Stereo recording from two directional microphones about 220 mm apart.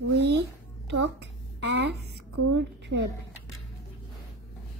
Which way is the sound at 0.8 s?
55° right (ahead or behind).